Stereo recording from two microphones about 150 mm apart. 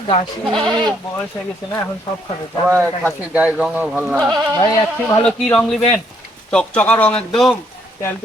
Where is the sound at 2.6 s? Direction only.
15° right (ahead or behind).